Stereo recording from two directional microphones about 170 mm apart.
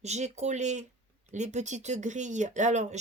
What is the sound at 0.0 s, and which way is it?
Speech, 40° right (ahead or behind).